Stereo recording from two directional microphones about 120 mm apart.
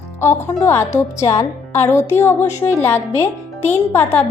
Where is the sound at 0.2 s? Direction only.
20° left (ahead or behind).